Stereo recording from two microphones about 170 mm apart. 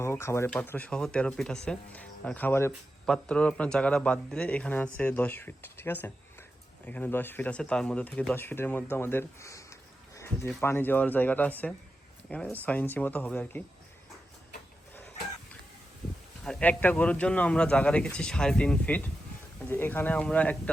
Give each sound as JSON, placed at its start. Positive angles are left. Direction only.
{"t": 0.0, "sound": "speech", "side_deg": 15}
{"t": 16.4, "sound": "speech", "side_deg": 5}